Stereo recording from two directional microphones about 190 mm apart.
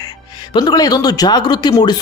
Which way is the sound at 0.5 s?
20° left (ahead or behind).